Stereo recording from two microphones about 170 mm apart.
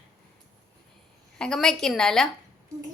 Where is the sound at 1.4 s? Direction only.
5° left (ahead or behind).